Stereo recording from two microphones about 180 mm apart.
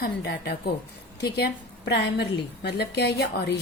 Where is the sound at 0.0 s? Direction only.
65° left (ahead or behind).